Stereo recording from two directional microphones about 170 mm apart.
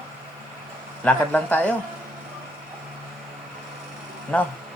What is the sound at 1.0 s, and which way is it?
Speech, 10° left (ahead or behind).